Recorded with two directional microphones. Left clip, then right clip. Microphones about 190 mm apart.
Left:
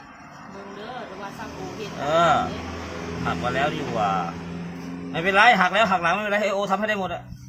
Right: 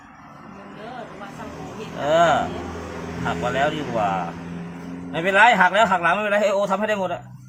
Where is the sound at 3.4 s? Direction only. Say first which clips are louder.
Right 3 dB; 25° right (ahead or behind).